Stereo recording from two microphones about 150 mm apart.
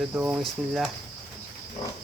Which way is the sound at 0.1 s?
10° right (ahead or behind).